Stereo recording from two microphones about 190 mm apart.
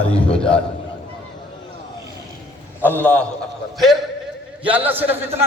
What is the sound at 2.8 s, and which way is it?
Speech, 10° left (ahead or behind).